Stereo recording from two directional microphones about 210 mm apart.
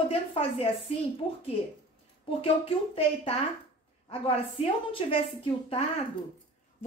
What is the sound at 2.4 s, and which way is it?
Speech, 25° left (ahead or behind).